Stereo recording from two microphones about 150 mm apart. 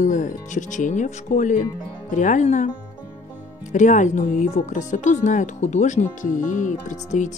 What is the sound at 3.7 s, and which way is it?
Speech, 55° left (ahead or behind).